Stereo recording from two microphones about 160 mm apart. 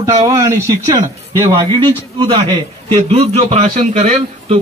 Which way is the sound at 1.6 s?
30° right (ahead or behind).